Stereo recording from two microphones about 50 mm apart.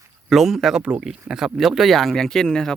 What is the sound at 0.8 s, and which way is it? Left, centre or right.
Speech, right.